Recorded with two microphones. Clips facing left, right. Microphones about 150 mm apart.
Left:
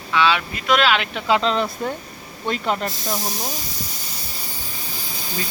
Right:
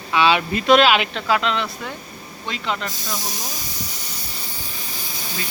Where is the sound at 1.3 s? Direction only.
35° left (ahead or behind).